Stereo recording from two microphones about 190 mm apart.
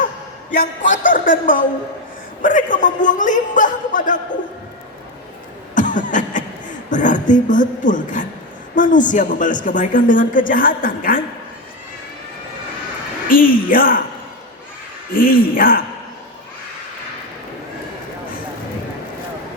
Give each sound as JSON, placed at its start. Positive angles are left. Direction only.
{"t": 0.5, "sound": "a woman's voice", "side_deg": 45}
{"t": 5.7, "sound": "a sound", "side_deg": 40}
{"t": 8.7, "sound": "a woman's voice", "side_deg": 45}
{"t": 13.2, "sound": "a man's voice", "side_deg": 45}
{"t": 15.1, "sound": "a woman's voice", "side_deg": 50}